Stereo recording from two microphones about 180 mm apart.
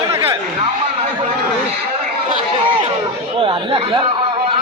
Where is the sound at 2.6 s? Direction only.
30° right (ahead or behind).